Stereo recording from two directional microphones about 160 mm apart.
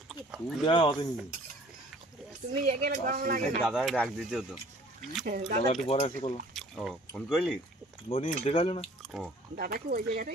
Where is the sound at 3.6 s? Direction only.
Centre (ahead or behind).